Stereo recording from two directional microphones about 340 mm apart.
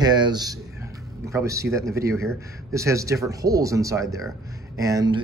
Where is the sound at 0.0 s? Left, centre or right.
Centre.